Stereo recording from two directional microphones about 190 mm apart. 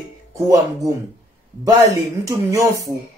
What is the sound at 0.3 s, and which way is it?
Speech, 15° right (ahead or behind).